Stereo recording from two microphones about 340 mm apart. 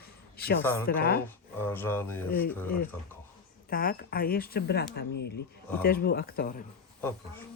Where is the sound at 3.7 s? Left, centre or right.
Left.